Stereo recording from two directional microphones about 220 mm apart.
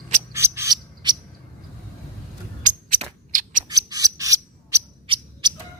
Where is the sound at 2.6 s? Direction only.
35° right (ahead or behind).